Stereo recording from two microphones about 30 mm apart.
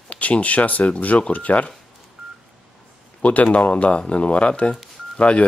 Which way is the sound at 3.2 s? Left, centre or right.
Left.